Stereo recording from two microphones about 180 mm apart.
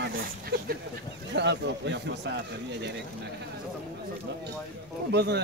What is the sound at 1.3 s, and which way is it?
Speech, 75° right (ahead or behind).